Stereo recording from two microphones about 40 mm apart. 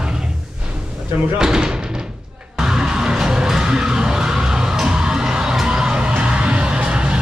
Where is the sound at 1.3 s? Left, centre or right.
Centre.